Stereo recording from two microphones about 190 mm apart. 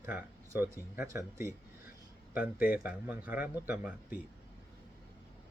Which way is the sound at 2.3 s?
50° left (ahead or behind).